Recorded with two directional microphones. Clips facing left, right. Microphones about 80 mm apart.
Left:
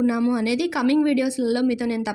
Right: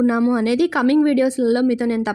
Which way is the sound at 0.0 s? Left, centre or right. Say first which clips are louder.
Right 4 dB; right.